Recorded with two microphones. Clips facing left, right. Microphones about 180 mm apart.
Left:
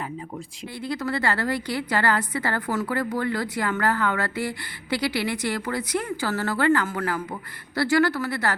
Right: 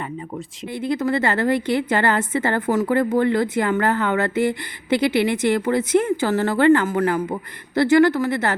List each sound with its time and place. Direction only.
0.8 s a woman's voice: 20° right (ahead or behind)